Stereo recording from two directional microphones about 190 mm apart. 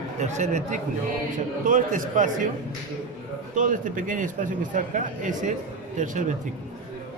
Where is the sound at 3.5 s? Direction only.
40° right (ahead or behind).